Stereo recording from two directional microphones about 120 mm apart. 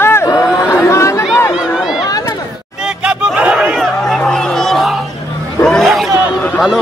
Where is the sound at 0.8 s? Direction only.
25° left (ahead or behind).